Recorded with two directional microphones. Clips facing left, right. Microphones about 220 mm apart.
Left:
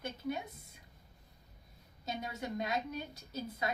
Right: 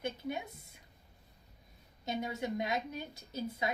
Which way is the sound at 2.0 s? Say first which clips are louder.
Right 4 dB; 25° right (ahead or behind).